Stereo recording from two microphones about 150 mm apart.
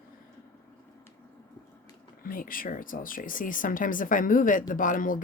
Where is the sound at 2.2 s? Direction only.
70° left (ahead or behind).